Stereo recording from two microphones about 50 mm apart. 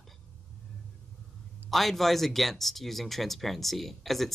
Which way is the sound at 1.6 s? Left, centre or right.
Centre.